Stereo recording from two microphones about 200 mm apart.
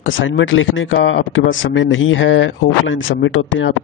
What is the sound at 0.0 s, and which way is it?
Speech, 70° left (ahead or behind).